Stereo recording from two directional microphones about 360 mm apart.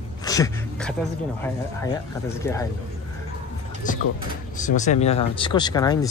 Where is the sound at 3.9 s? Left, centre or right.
Left.